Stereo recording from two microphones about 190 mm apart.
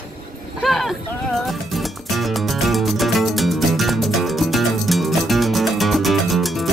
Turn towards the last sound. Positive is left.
turn(degrees=0)  # may be behind; listen again after turning